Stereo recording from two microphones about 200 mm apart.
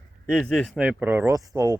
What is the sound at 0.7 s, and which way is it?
Speech, 5° right (ahead or behind).